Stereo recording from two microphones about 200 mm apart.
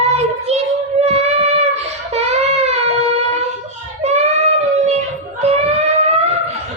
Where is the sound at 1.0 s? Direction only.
30° right (ahead or behind).